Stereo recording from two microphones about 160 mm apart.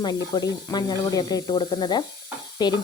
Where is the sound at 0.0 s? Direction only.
25° left (ahead or behind).